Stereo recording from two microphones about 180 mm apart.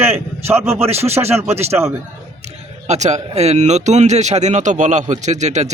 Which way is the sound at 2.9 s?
40° right (ahead or behind).